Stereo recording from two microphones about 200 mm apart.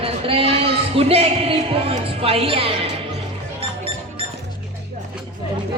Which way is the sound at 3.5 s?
30° right (ahead or behind).